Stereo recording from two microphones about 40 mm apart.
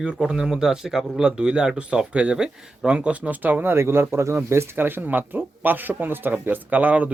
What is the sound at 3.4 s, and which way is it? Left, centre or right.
Speech, right.